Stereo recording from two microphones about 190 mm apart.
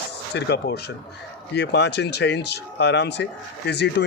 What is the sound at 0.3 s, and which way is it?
Speech, 60° left (ahead or behind).